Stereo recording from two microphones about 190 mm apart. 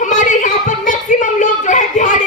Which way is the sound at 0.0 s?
40° left (ahead or behind).